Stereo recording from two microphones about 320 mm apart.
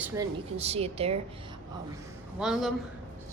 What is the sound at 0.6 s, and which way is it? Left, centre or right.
Speech, centre.